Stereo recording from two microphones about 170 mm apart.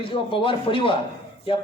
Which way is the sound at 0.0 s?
30° left (ahead or behind).